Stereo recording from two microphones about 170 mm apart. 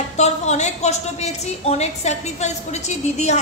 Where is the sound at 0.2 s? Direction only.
40° left (ahead or behind).